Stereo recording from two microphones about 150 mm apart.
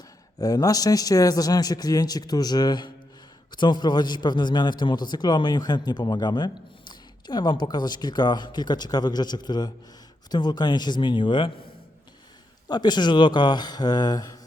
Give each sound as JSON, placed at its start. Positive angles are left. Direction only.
{"t": 0.3, "sound": "a man's voice", "side_deg": 25}
{"t": 12.6, "sound": "a man's voice", "side_deg": 30}